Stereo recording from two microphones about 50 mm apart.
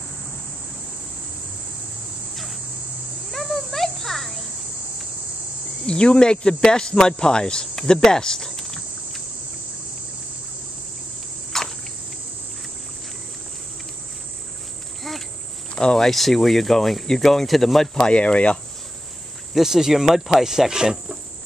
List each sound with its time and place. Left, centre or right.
2.3 s a sound: centre
3.3 s children playing: centre
5.9 s speech: centre
11.5 s a sound: centre
15.7 s speech: centre
16.1 s speech: centre
17.9 s speech: left
19.5 s speech: centre